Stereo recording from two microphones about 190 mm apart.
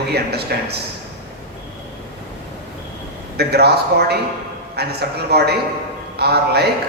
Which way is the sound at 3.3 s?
60° right (ahead or behind).